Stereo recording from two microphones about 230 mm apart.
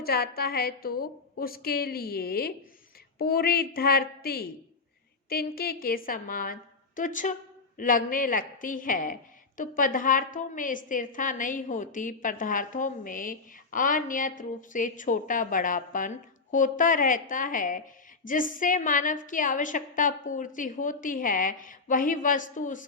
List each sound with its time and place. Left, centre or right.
0.0 s a woman's voice: left